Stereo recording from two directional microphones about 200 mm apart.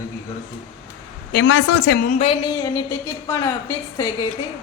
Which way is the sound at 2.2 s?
25° left (ahead or behind).